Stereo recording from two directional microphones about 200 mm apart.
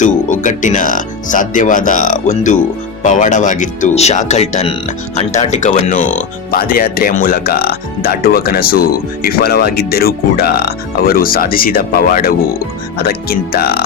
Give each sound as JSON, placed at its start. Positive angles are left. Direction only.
{"t": 0.0, "sound": "speech", "side_deg": 40}